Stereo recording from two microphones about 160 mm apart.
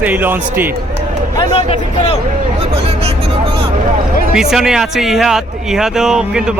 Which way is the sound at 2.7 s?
40° right (ahead or behind).